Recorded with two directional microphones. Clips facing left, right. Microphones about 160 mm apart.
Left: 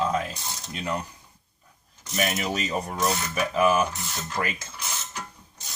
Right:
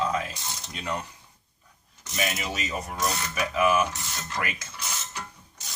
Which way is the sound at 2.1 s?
40° left (ahead or behind).